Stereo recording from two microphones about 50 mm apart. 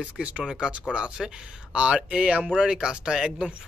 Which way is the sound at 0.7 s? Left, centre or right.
Right.